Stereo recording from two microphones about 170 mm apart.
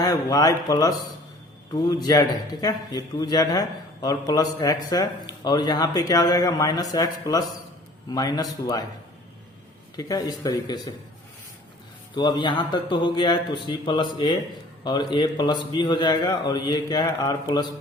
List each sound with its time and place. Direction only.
0.0 s a man's voice: 20° left (ahead or behind)
10.0 s a man's voice: 20° left (ahead or behind)
12.1 s a man's voice: 25° left (ahead or behind)